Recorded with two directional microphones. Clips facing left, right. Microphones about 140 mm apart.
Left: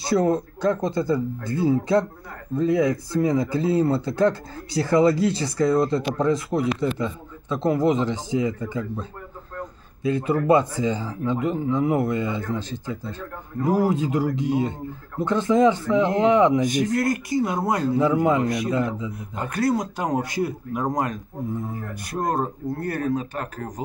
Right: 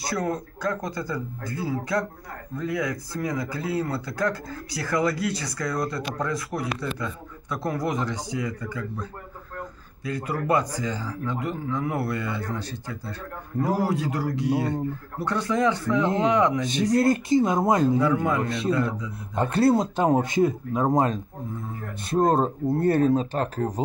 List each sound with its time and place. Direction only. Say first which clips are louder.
0.0 s speech: left 7 dB; 25° left (ahead or behind)
10.0 s speech: left 7 dB; 25° left (ahead or behind)
16.7 s speech: right 1 dB; 25° right (ahead or behind)
17.9 s speech: left 3 dB; 20° left (ahead or behind)
19.3 s speech: right 3 dB; 30° right (ahead or behind)